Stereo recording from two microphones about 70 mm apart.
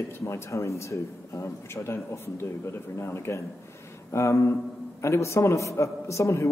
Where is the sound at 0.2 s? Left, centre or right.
Left.